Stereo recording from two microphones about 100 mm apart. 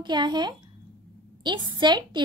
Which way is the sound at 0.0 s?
50° right (ahead or behind).